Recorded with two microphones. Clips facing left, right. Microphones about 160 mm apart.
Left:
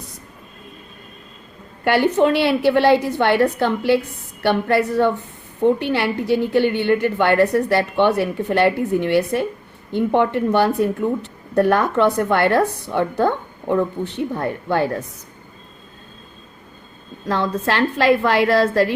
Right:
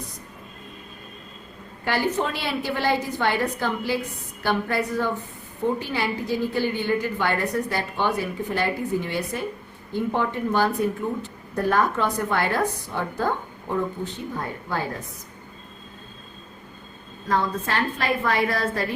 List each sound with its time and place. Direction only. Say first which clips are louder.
1.8 s a woman's voice: left 8 dB; 65° left (ahead or behind)
17.3 s a woman's voice: left 4 dB; 75° left (ahead or behind)